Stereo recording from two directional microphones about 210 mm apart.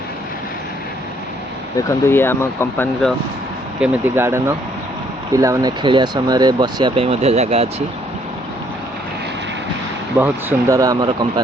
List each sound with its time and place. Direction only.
1.9 s speech: 10° left (ahead or behind)
3.8 s speech: 10° right (ahead or behind); by 7.7 s 30° right (ahead or behind)
10.2 s speech: 10° right (ahead or behind)